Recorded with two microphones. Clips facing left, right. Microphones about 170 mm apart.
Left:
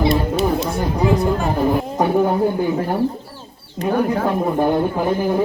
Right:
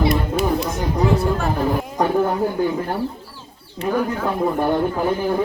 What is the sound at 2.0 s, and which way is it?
Speech, 15° left (ahead or behind).